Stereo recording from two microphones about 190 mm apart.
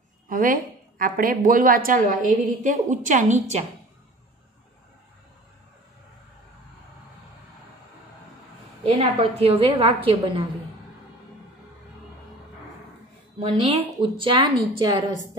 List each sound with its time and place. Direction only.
0.3 s a woman's voice: 50° right (ahead or behind)
8.8 s a woman's voice: 35° right (ahead or behind)
13.4 s speech: 30° right (ahead or behind)